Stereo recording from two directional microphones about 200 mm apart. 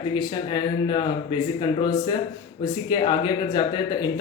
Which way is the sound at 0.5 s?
20° left (ahead or behind).